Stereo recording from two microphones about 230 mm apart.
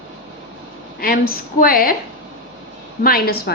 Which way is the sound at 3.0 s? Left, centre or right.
Left.